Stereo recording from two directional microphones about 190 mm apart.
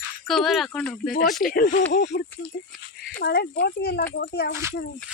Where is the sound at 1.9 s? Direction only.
65° left (ahead or behind).